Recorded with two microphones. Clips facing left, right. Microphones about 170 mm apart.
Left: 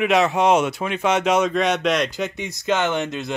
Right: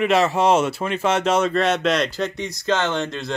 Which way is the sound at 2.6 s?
15° left (ahead or behind).